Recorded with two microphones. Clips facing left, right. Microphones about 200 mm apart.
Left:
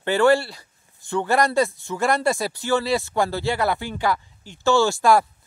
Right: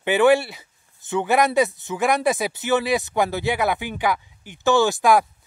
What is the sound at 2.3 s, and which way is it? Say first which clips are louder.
Speech: right 1 dB; 20° right (ahead or behind).